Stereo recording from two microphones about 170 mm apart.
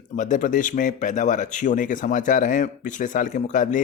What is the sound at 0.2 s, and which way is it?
Speech, 50° left (ahead or behind).